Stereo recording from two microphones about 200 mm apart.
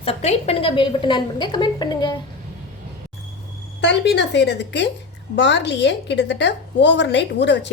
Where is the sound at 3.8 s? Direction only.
60° left (ahead or behind).